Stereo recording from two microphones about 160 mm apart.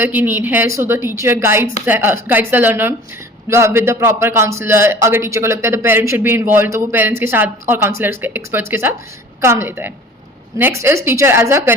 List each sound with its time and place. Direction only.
0.0 s a man's voice: 10° right (ahead or behind)